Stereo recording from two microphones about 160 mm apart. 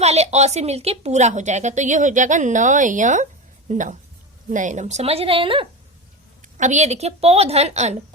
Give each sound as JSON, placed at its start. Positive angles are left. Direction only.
{"t": 0.0, "sound": "a woman's voice", "side_deg": -40}
{"t": 6.6, "sound": "a woman's voice", "side_deg": -50}